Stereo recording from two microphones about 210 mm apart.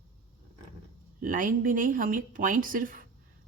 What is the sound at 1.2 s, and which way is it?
Speech, 40° right (ahead or behind).